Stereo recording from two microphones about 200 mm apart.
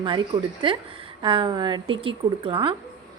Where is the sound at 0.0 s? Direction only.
25° right (ahead or behind).